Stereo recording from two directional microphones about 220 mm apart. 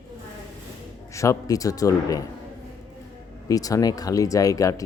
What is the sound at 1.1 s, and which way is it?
Speech, 15° left (ahead or behind).